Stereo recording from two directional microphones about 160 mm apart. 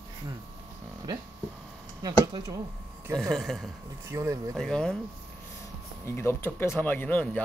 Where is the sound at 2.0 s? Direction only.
25° right (ahead or behind).